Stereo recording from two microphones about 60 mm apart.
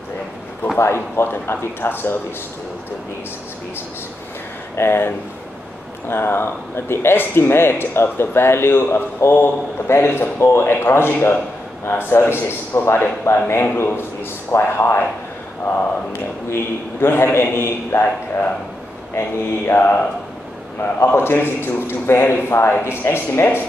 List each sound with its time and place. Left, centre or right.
0.7 s speech: left
4.7 s a man's voice: left
16.1 s speech: left
21.1 s speech: left